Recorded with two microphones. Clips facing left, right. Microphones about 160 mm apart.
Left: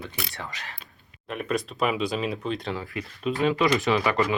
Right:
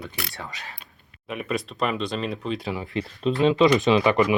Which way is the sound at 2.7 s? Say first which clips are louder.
Right 4 dB; 25° right (ahead or behind).